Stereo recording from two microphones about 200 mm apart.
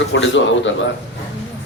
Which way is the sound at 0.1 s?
65° left (ahead or behind).